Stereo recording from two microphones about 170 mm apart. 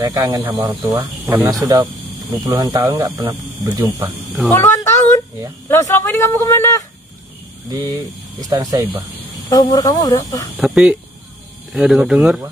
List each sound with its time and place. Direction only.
0.0 s speech: 25° right (ahead or behind)
0.7 s speech: 10° right (ahead or behind)
4.5 s a sound: 15° left (ahead or behind)
5.7 s speech: 15° left (ahead or behind)
7.7 s speech: 20° right (ahead or behind)
9.5 s speech: 20° left (ahead or behind)
10.6 s speech: 5° right (ahead or behind)